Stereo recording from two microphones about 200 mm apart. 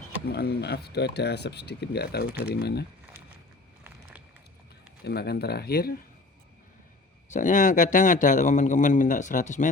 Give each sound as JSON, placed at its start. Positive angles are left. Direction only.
{"t": 0.3, "sound": "speech", "side_deg": 55}
{"t": 5.0, "sound": "speech", "side_deg": 55}
{"t": 7.3, "sound": "a man's voice", "side_deg": 40}